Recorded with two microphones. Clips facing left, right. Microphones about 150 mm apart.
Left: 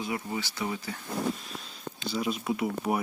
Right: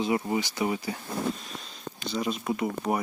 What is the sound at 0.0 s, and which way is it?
Speech, 25° right (ahead or behind).